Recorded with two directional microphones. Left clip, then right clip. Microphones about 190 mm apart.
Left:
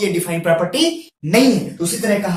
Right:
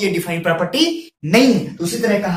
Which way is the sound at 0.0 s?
10° right (ahead or behind).